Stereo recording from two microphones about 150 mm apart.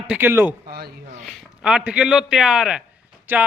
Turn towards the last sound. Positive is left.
turn(degrees=-10)  # may be behind; listen again after turning